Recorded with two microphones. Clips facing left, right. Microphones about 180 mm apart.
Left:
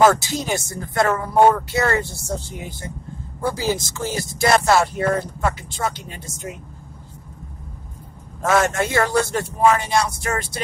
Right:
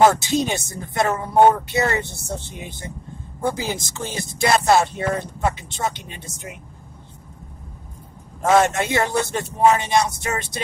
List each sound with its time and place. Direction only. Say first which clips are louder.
0.1 s speech: right 1 dB; 20° right (ahead or behind)
8.5 s speech: right 2 dB; 20° right (ahead or behind)